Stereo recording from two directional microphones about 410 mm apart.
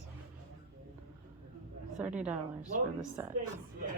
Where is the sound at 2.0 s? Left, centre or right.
Centre.